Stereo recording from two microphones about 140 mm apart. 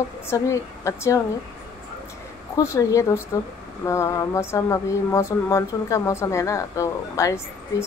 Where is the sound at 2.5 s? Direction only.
20° left (ahead or behind).